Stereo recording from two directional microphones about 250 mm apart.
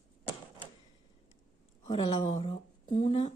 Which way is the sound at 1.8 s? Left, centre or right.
Left.